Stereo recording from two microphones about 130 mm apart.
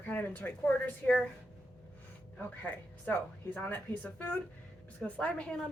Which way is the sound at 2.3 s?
15° left (ahead or behind).